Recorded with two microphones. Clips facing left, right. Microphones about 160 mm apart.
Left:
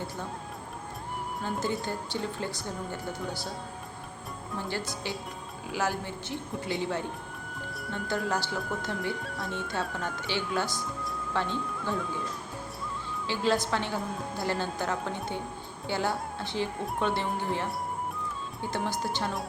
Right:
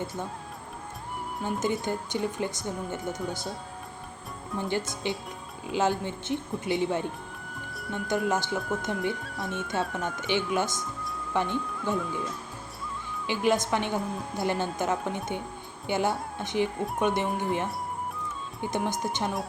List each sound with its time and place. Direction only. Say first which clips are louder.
1.5 s speech: right 3 dB; 20° right (ahead or behind)
5.0 s a woman's voice: right 3 dB; 20° right (ahead or behind)
13.2 s a woman's voice: right 2 dB; 15° right (ahead or behind)